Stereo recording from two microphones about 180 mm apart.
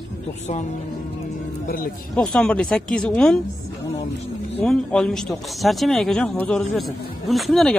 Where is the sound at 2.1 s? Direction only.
5° left (ahead or behind).